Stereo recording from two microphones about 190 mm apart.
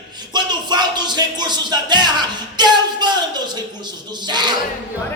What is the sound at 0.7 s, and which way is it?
Music, 20° right (ahead or behind).